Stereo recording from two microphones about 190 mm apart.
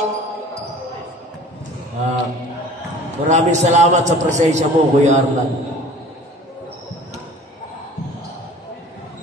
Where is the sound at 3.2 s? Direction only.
35° right (ahead or behind).